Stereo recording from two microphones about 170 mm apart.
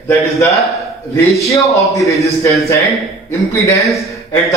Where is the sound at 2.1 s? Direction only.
20° left (ahead or behind).